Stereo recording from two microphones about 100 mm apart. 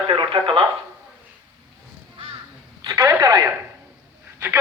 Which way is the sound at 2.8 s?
40° right (ahead or behind).